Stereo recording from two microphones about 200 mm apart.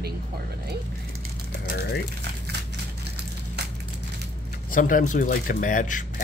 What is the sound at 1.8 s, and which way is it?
Speech, 55° left (ahead or behind).